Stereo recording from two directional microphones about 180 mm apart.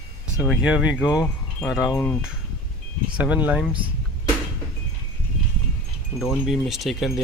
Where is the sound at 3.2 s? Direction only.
10° right (ahead or behind).